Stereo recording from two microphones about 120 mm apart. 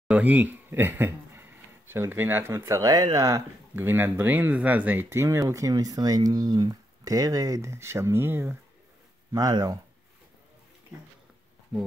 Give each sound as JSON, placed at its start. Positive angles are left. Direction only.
{"t": 0.1, "sound": "a man's voice", "side_deg": -15}
{"t": 9.3, "sound": "speech", "side_deg": -30}